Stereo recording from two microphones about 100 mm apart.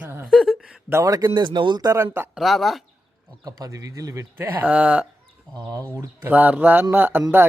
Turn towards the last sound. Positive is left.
turn(degrees=-20)  # may be behind; listen again after turning